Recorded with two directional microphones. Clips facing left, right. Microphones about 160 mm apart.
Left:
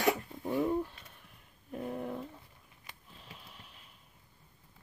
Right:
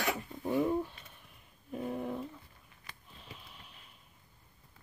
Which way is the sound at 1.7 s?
Centre (ahead or behind).